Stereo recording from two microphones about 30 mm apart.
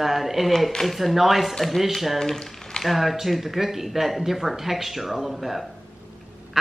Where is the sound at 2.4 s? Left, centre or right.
Left.